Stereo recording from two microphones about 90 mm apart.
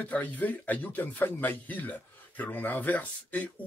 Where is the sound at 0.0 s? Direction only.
15° left (ahead or behind).